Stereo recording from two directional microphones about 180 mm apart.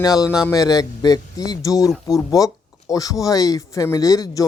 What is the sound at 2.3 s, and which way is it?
Speech, 20° left (ahead or behind).